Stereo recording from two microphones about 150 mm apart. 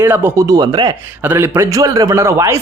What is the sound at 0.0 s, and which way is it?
Speech, 15° right (ahead or behind).